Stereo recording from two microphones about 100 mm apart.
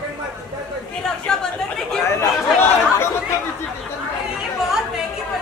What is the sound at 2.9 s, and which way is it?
Chatter, 25° left (ahead or behind).